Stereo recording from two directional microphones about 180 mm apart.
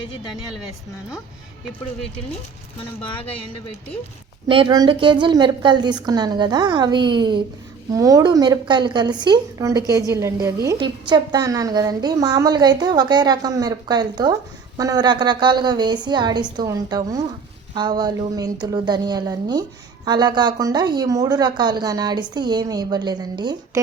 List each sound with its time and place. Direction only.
4.4 s a woman's voice: 30° right (ahead or behind)